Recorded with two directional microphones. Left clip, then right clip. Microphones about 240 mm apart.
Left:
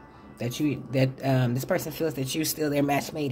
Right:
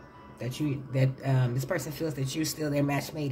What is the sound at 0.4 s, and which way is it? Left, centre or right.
Speech, left.